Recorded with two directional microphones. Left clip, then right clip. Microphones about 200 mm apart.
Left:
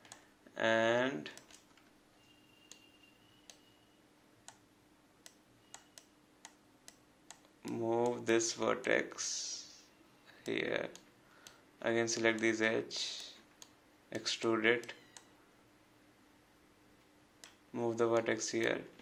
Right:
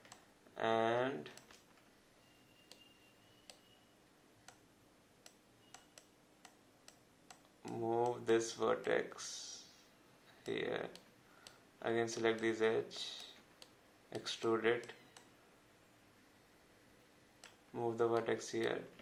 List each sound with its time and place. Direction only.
0.5 s speech: 35° left (ahead or behind)
7.9 s speech: 30° left (ahead or behind)
14.3 s speech: 30° left (ahead or behind)
17.7 s speech: 30° left (ahead or behind)